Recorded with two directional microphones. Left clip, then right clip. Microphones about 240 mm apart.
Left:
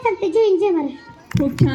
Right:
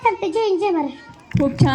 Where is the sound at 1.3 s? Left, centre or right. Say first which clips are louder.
Right 1 dB; left.